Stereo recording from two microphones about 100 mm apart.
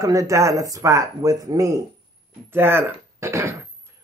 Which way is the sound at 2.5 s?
25° right (ahead or behind).